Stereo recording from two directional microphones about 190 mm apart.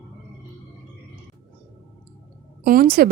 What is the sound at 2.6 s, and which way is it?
Speech, 50° right (ahead or behind).